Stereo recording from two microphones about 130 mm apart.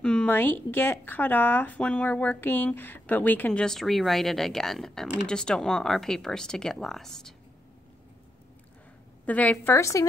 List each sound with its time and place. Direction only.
0.0 s speech: 5° left (ahead or behind)
9.2 s speech: 10° left (ahead or behind)
9.8 s speech: 25° left (ahead or behind)